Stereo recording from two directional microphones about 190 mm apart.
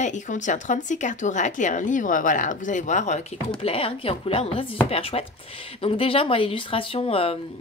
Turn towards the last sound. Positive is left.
turn(degrees=30)  # may be behind; listen again after turning